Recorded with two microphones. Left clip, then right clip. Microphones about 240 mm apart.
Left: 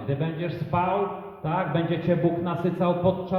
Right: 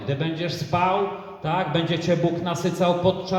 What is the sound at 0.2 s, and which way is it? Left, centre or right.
A man's voice, right.